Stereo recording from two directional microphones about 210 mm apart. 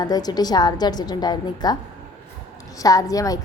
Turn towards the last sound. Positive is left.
turn(degrees=15)  # may be behind; listen again after turning